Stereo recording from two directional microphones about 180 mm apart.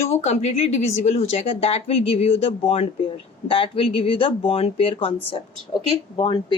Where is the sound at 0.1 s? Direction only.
35° left (ahead or behind).